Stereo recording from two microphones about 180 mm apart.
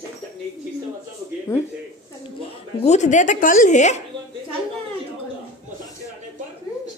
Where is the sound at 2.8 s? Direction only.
40° left (ahead or behind).